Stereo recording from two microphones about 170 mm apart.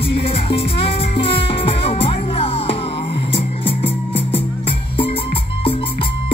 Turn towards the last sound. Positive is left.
turn(degrees=35)  # may be behind; listen again after turning